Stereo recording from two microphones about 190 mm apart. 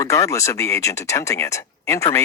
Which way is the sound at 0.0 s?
15° left (ahead or behind).